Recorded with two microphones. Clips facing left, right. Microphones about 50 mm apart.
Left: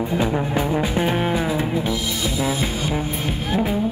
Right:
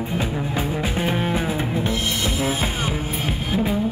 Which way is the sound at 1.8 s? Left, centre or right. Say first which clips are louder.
Even; right.